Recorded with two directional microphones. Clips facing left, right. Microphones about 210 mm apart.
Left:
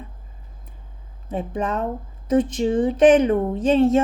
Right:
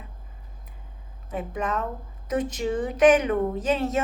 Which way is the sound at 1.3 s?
30° left (ahead or behind).